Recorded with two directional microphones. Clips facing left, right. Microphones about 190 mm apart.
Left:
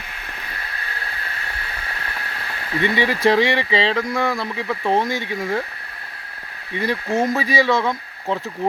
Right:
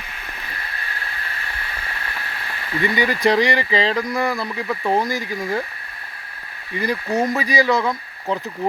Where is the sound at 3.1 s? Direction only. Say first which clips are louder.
Left 1 dB; centre (ahead or behind).